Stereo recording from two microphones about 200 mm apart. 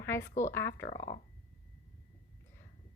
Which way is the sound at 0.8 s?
35° left (ahead or behind).